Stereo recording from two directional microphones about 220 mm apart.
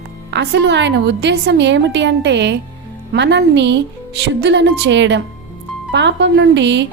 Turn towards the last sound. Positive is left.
turn(degrees=-55)  # may be behind; listen again after turning